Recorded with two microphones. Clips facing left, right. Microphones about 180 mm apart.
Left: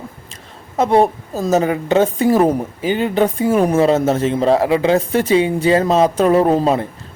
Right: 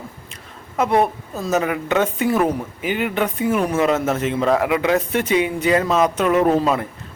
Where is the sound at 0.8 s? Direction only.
30° left (ahead or behind).